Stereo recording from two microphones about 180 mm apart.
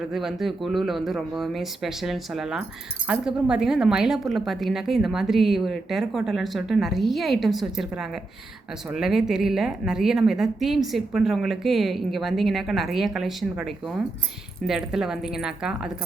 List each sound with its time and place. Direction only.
0.0 s speech: centre (ahead or behind)